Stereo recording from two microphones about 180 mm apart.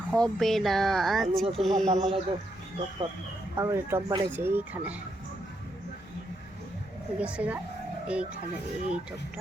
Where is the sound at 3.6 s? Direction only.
15° right (ahead or behind).